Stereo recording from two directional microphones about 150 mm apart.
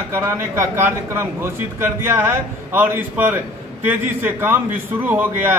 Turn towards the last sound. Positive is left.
turn(degrees=-15)  # may be behind; listen again after turning